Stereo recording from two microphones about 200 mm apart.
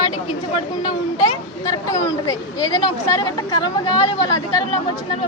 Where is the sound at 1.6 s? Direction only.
15° left (ahead or behind).